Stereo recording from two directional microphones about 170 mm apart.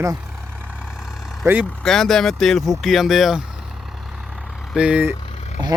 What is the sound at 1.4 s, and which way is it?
Speech, 10° right (ahead or behind).